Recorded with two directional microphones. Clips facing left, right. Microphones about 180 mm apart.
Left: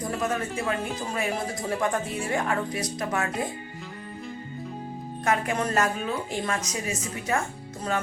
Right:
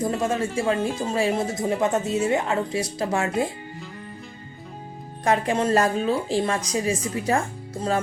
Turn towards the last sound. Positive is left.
turn(degrees=-30)  # may be behind; listen again after turning